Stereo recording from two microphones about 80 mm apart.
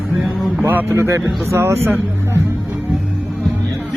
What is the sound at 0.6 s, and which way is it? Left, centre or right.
Speech, right.